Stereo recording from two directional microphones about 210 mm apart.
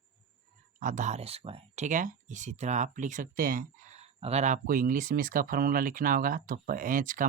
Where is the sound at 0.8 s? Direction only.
35° right (ahead or behind).